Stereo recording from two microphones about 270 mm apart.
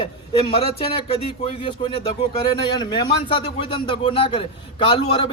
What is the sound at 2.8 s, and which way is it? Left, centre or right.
A man's voice, centre.